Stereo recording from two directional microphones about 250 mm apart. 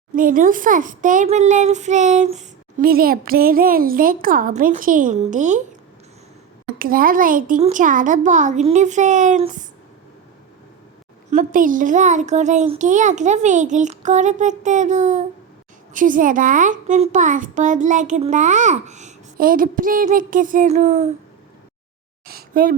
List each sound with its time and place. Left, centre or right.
0.2 s a child's voice: right
6.7 s a child's voice: right
11.3 s a child's voice: right
22.3 s a sound: right